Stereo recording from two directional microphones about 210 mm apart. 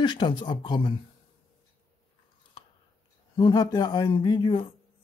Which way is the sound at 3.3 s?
20° left (ahead or behind).